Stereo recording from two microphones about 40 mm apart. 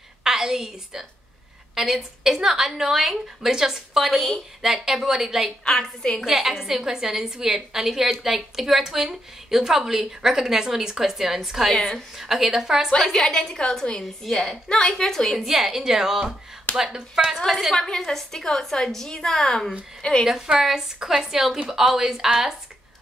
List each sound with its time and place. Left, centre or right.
0.2 s a woman's voice: centre
5.7 s a woman's voice: centre
6.2 s a woman's voice: centre
13.1 s a woman's voice: centre
14.2 s a woman's voice: centre
14.7 s a woman's voice: centre
15.3 s a woman's voice: centre
17.5 s a woman's voice: centre
17.7 s a woman's voice: centre
20.2 s a woman's voice: centre